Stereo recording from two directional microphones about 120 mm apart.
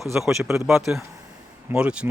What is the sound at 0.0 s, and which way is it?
Speech, centre (ahead or behind).